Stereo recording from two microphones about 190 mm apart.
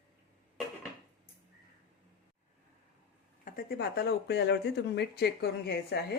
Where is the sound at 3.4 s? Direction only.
55° left (ahead or behind).